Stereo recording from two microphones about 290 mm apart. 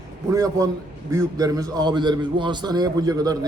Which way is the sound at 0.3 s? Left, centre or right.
Centre.